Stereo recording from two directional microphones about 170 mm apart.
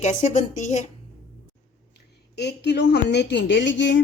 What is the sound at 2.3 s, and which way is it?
A woman's voice, 80° left.